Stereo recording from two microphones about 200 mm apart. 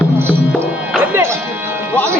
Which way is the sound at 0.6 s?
10° right (ahead or behind).